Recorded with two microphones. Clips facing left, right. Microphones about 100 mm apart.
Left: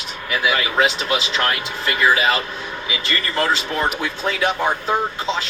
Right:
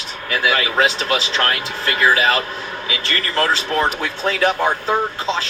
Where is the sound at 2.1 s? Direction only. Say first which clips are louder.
Right 2 dB; 5° left (ahead or behind).